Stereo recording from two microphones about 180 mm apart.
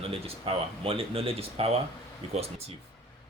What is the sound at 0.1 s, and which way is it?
Speech, 30° right (ahead or behind).